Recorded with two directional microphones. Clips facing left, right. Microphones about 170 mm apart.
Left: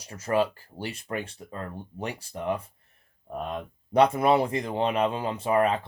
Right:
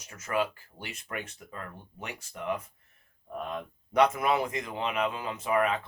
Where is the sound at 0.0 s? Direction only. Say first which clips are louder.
Left 5 dB; 35° left (ahead or behind).